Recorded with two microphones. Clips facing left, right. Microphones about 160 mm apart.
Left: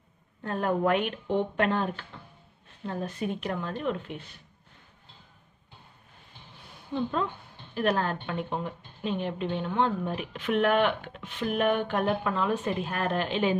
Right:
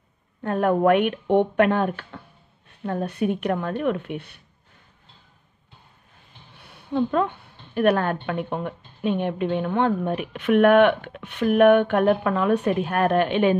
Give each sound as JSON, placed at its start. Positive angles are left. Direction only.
{"t": 0.4, "sound": "a woman's voice", "side_deg": -65}
{"t": 6.6, "sound": "a woman's voice", "side_deg": -65}